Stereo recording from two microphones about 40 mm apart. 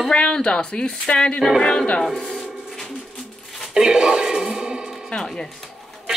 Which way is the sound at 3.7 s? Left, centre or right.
Centre.